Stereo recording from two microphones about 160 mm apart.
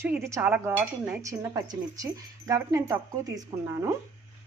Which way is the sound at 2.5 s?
20° right (ahead or behind).